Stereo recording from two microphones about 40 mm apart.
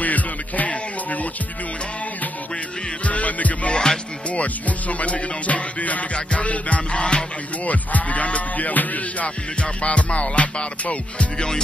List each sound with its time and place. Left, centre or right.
0.0 s music: left
3.1 s music: left
3.7 s music: centre
4.3 s music: left
7.6 s music: left
9.6 s music: left